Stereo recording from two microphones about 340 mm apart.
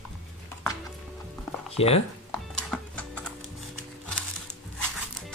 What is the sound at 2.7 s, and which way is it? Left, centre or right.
Music, centre.